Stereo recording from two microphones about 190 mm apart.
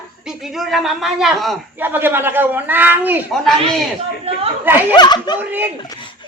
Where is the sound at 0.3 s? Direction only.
Centre (ahead or behind).